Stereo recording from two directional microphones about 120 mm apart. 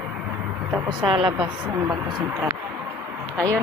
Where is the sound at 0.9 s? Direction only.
45° right (ahead or behind).